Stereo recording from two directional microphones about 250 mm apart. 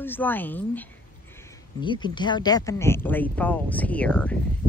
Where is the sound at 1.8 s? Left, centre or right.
Centre.